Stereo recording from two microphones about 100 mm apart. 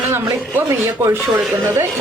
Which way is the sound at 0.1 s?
25° right (ahead or behind).